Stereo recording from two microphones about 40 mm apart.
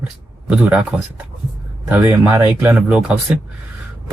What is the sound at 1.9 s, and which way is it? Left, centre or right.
Speech, right.